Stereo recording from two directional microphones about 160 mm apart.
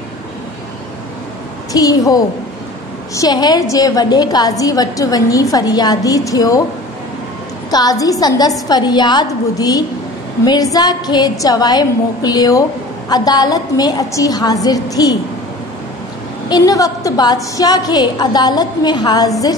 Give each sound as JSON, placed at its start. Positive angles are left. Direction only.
{"t": 1.7, "sound": "a woman's voice", "side_deg": 20}
{"t": 7.7, "sound": "a woman's voice", "side_deg": 25}
{"t": 16.4, "sound": "a woman's voice", "side_deg": 25}